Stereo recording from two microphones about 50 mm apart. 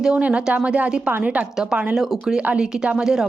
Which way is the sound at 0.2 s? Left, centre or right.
Right.